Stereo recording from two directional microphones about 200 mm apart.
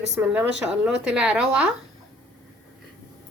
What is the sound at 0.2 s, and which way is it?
A woman's voice, 5° right (ahead or behind).